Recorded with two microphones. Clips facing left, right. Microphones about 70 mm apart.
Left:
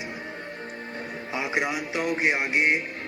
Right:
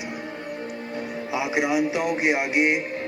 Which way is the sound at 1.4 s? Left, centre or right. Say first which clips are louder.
Right 2 dB; left.